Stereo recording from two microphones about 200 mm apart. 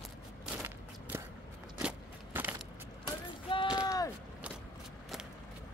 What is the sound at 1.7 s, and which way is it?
Biting, 10° right (ahead or behind).